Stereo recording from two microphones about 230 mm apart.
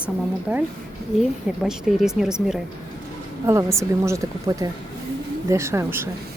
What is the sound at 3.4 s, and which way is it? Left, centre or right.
A woman's voice, centre.